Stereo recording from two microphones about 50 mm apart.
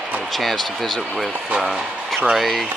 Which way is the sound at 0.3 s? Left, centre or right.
Centre.